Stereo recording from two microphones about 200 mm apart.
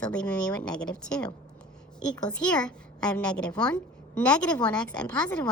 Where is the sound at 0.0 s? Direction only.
5° left (ahead or behind).